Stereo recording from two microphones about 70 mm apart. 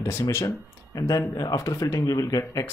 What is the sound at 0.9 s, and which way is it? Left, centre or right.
Speech, left.